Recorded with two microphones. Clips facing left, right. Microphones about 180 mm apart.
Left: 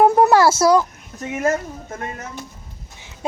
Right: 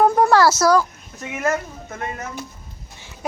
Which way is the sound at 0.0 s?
25° left (ahead or behind).